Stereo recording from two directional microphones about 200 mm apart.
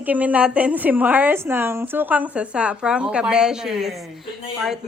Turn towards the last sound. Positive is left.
turn(degrees=0)  # may be behind; listen again after turning